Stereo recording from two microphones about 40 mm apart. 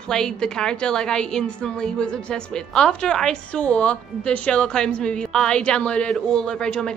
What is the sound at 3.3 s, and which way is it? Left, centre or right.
A woman's voice, left.